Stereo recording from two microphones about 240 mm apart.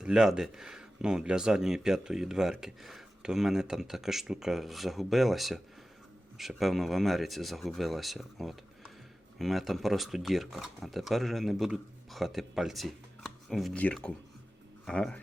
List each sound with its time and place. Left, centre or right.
0.0 s speech: centre